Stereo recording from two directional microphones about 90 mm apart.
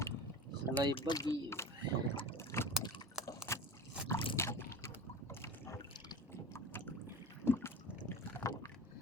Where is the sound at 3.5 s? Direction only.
30° left (ahead or behind).